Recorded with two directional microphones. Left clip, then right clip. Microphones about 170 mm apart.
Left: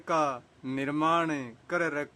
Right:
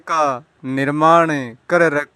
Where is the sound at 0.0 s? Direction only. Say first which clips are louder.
Right 10 dB; 35° right (ahead or behind).